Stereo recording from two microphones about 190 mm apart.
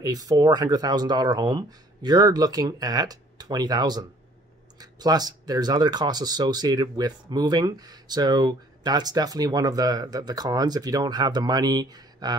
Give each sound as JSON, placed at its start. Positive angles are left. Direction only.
{"t": 0.0, "sound": "speech", "side_deg": -20}